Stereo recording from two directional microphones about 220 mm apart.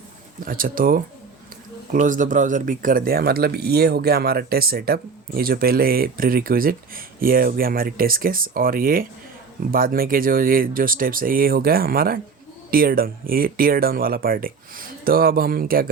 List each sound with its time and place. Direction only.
0.3 s speech: 40° right (ahead or behind)